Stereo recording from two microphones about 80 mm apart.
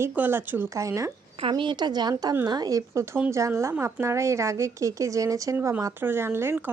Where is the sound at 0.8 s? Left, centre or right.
Right.